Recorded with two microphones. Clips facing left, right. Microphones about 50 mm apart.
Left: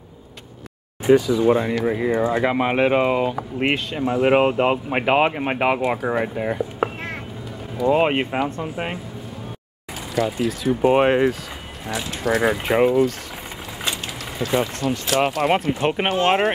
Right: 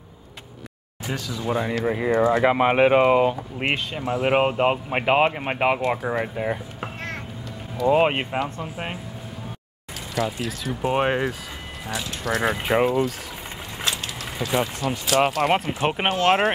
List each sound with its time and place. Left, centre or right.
1.0 s speech: centre
1.6 s speech: centre
2.4 s speech: centre
3.5 s speech: centre
7.8 s speech: centre
10.1 s speech: centre
10.7 s speech: centre
11.1 s speech: centre
14.4 s speech: centre
15.0 s speech: centre